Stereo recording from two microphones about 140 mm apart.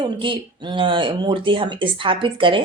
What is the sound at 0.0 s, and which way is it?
A woman's voice, 35° right (ahead or behind).